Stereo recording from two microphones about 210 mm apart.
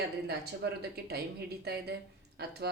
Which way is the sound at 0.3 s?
50° right (ahead or behind).